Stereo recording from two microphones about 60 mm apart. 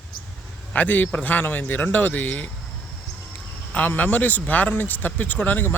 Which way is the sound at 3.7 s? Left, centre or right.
Left.